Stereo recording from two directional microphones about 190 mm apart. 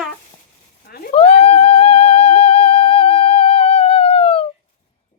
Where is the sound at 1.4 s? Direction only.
35° left (ahead or behind).